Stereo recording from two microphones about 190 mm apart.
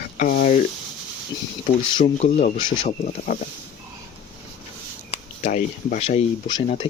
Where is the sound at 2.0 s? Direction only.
40° left (ahead or behind).